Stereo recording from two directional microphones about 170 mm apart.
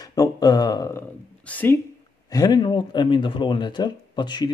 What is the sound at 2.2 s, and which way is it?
Speech, 25° left (ahead or behind).